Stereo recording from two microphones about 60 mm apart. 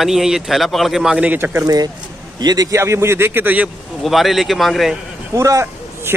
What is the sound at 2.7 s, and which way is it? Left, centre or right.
Speech, right.